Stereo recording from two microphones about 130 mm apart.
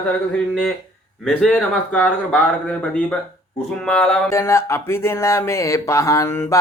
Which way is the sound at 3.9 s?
10° left (ahead or behind).